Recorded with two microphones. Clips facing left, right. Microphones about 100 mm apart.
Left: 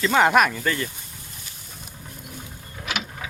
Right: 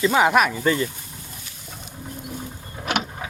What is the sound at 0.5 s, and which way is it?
Speech, 20° right (ahead or behind).